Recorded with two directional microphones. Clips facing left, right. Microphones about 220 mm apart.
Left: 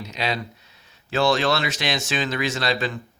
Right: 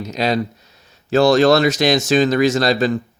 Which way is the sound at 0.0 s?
40° right (ahead or behind).